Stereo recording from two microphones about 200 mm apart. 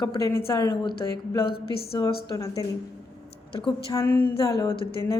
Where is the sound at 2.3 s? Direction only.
15° left (ahead or behind).